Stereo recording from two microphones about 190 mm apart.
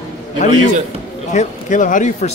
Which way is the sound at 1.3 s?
40° left (ahead or behind).